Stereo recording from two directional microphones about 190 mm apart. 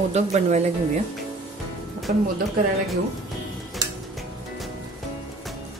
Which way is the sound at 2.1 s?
45° right (ahead or behind).